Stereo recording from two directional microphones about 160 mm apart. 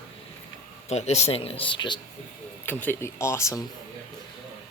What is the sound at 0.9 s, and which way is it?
Speech, 40° left (ahead or behind).